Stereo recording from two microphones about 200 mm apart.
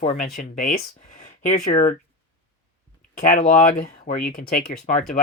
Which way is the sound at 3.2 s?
40° left (ahead or behind).